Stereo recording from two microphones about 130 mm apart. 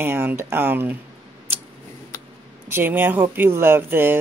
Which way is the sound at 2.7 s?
15° right (ahead or behind).